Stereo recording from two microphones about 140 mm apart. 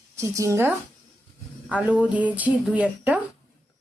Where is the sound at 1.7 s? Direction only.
10° right (ahead or behind).